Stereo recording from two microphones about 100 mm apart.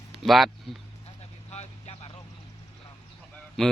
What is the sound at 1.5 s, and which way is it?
Vehicle, 90° left.